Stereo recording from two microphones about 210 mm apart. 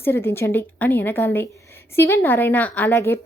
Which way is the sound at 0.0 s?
10° left (ahead or behind).